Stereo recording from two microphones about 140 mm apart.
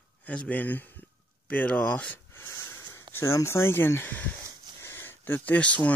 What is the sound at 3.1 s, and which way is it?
Speech, 20° left (ahead or behind).